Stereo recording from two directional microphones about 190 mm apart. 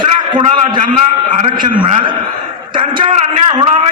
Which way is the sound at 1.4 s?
25° right (ahead or behind).